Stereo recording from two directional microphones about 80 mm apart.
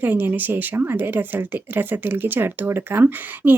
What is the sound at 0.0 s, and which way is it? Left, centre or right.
Speech, right.